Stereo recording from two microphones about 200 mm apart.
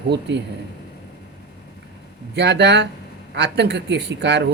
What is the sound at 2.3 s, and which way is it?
Speech, 60° right (ahead or behind).